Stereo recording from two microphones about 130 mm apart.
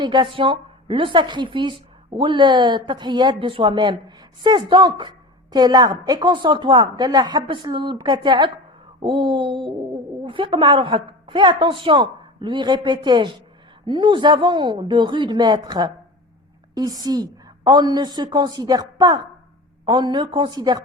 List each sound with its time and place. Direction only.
0.0 s a woman's voice: 35° right (ahead or behind)